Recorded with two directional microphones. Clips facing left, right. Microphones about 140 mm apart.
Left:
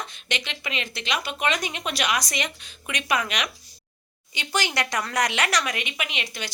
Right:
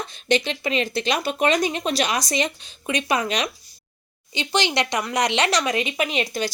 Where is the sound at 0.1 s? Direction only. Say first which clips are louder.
Right 11 dB; 35° right (ahead or behind).